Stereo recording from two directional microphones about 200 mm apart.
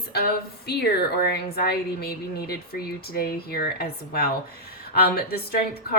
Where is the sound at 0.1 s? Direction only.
55° left (ahead or behind).